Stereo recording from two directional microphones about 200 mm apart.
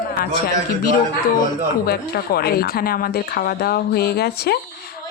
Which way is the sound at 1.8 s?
50° left (ahead or behind).